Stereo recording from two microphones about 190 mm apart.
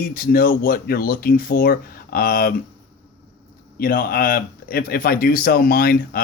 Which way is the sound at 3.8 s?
50° left (ahead or behind).